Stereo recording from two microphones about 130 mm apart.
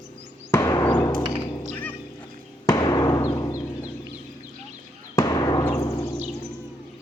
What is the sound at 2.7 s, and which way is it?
Timpani, 30° left (ahead or behind).